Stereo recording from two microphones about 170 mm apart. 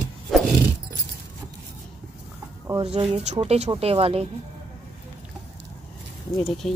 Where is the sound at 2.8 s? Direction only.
40° right (ahead or behind).